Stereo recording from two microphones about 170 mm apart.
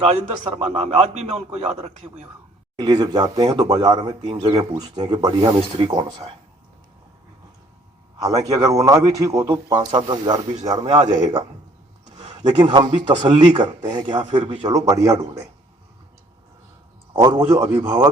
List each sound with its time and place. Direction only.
0.6 s speech: 35° right (ahead or behind)
2.7 s speech: 20° right (ahead or behind)
8.2 s speech: 20° right (ahead or behind)
12.0 s a sound: 25° right (ahead or behind)
12.5 s speech: 25° right (ahead or behind)
14.8 s speech: 20° right (ahead or behind)
17.2 s speech: 20° right (ahead or behind)